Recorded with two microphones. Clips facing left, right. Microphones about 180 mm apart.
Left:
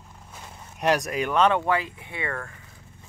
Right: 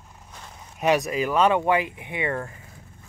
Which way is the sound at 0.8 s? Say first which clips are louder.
Right 2 dB; centre (ahead or behind).